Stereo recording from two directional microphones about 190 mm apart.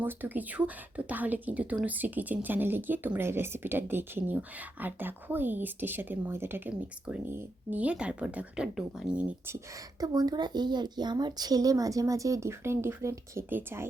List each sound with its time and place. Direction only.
0.0 s a woman's voice: 10° right (ahead or behind)
10.0 s a woman's voice: 20° right (ahead or behind)